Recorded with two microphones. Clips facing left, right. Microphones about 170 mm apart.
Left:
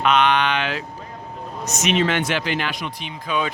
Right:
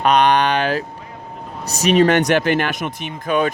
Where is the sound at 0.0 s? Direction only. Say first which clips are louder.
Right 3 dB; 40° right (ahead or behind).